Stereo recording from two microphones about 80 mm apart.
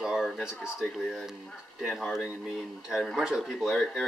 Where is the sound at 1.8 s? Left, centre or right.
Centre.